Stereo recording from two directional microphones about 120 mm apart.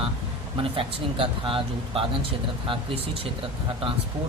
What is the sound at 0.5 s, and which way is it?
Speech, 50° right (ahead or behind).